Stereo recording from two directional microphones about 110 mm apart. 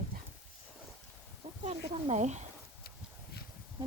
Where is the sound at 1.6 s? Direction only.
60° right (ahead or behind); by 2.4 s 90° right.